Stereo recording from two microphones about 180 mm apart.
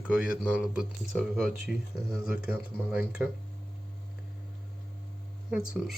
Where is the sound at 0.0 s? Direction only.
5° right (ahead or behind).